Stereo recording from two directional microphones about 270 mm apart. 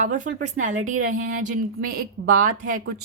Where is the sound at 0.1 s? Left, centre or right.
Right.